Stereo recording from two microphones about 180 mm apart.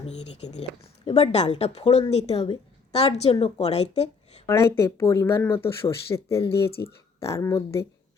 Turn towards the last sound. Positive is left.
turn(degrees=15)  # may be behind; listen again after turning